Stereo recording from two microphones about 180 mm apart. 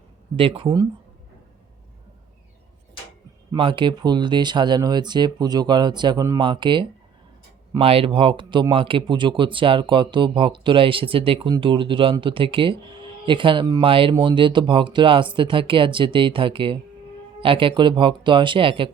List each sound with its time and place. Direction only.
0.3 s speech: 30° right (ahead or behind)
3.5 s speech: 25° right (ahead or behind)